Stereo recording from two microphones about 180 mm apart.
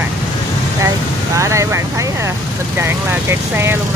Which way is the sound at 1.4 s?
15° right (ahead or behind).